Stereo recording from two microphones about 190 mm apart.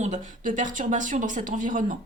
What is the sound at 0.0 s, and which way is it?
Speech, 40° right (ahead or behind).